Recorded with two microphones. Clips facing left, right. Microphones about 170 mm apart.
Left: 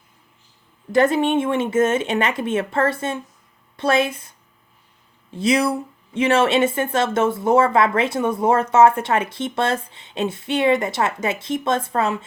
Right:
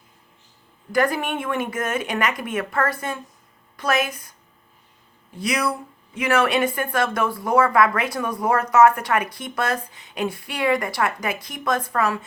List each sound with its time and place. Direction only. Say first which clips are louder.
0.9 s speech: left 5 dB; 25° left (ahead or behind)
5.4 s speech: left 5 dB; 25° left (ahead or behind)